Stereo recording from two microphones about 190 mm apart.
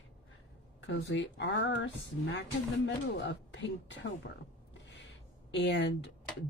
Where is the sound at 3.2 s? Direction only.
70° left (ahead or behind).